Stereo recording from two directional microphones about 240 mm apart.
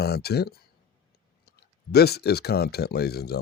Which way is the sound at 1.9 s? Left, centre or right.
Left.